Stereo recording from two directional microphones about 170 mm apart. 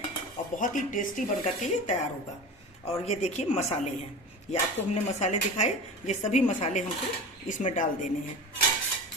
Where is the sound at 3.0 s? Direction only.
40° left (ahead or behind).